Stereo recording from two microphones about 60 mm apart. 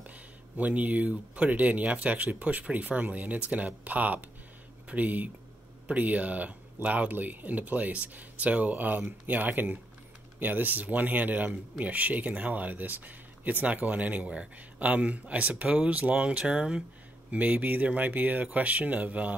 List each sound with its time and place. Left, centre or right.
0.0 s speech: right
17.3 s speech: right